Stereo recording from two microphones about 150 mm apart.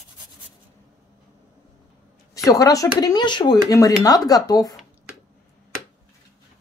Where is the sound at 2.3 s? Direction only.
20° left (ahead or behind).